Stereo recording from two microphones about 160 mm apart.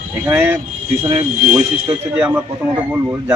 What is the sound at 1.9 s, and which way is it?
A man's voice, 15° right (ahead or behind).